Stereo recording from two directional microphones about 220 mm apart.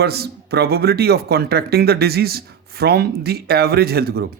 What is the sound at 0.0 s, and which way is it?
A man's voice, 45° right (ahead or behind).